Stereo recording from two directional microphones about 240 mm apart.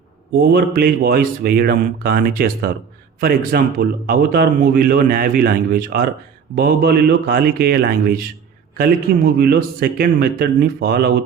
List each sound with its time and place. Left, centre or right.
0.3 s a man's voice: right